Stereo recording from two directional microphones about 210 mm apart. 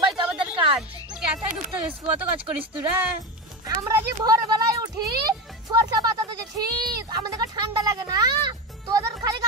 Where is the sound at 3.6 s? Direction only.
15° right (ahead or behind).